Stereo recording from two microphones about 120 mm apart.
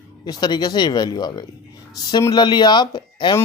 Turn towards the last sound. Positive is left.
turn(degrees=40)  # may be behind; listen again after turning